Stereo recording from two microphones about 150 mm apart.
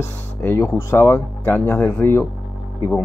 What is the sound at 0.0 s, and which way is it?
Speech, 15° left (ahead or behind).